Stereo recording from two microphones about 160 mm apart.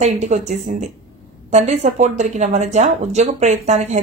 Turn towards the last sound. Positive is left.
turn(degrees=-45)  # may be behind; listen again after turning